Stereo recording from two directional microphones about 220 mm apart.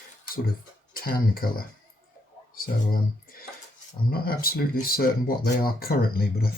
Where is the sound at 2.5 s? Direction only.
40° left (ahead or behind).